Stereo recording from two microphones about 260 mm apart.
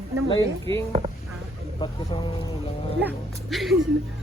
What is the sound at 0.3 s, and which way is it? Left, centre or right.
Speech, centre.